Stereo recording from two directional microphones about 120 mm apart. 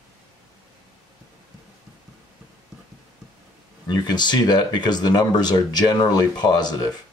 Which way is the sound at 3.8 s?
35° left (ahead or behind).